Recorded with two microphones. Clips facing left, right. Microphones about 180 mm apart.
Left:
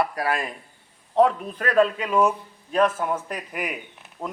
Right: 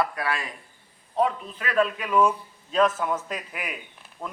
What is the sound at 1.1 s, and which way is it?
Speech, 70° left (ahead or behind).